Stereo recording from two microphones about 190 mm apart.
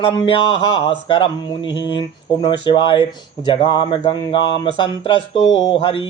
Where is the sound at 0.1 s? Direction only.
25° left (ahead or behind).